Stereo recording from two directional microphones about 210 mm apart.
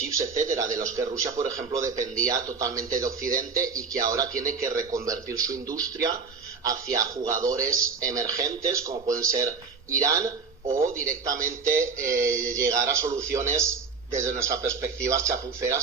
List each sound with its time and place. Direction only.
0.0 s speech: 15° right (ahead or behind)